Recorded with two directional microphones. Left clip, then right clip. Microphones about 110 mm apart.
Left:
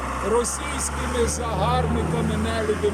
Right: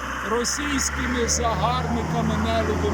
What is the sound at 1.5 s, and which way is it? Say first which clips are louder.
Speech: left 1 dB; 60° left (ahead or behind).